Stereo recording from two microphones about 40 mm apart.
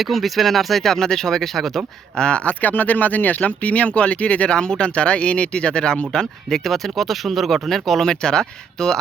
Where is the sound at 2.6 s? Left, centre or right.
Left; by 8.0 s centre.